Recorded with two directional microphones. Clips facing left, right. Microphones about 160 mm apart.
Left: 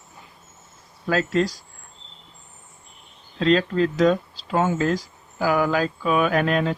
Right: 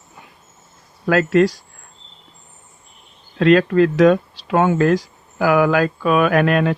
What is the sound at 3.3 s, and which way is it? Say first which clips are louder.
Speech: right 6 dB; 65° right (ahead or behind).